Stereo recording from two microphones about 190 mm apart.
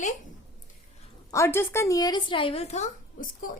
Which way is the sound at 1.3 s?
15° left (ahead or behind).